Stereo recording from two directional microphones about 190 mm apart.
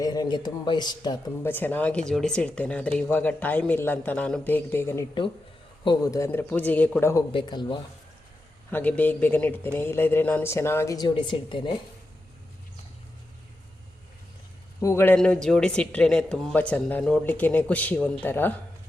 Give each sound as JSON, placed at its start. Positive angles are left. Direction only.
{"t": 0.0, "sound": "speech", "side_deg": 20}
{"t": 1.5, "sound": "speech", "side_deg": 10}
{"t": 7.3, "sound": "speech", "side_deg": 25}
{"t": 8.7, "sound": "speech", "side_deg": 10}
{"t": 14.8, "sound": "speech", "side_deg": 15}